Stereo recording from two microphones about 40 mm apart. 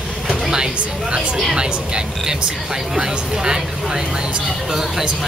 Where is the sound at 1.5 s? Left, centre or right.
Centre.